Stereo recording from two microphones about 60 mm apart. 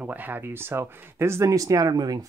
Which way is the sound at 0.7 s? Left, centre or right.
Right.